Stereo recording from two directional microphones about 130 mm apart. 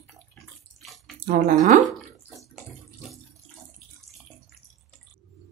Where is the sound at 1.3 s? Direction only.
80° right.